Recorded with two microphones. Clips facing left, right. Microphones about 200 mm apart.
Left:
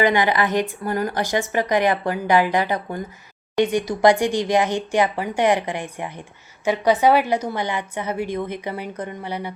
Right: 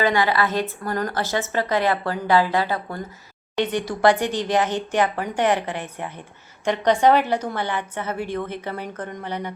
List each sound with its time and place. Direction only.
0.0 s a woman's voice: 15° left (ahead or behind)